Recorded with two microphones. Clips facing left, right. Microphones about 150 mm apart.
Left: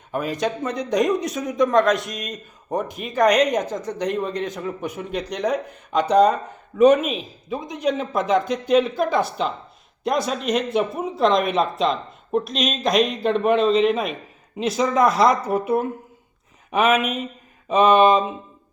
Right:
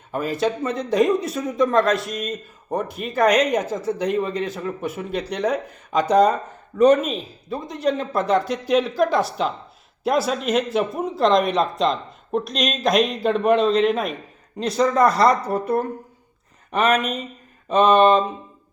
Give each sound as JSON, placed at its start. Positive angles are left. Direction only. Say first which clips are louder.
{"t": 0.1, "sound": "speech", "louder": "right 1 dB", "side_deg": 0}